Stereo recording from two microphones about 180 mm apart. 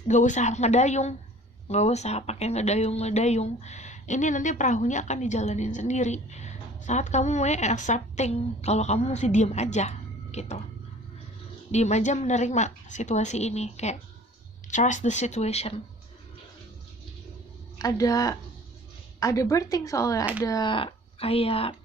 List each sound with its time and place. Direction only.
0.1 s speech: 40° left (ahead or behind)
10.3 s a sound: 40° left (ahead or behind)
11.7 s speech: 40° left (ahead or behind)
17.7 s speech: 20° left (ahead or behind)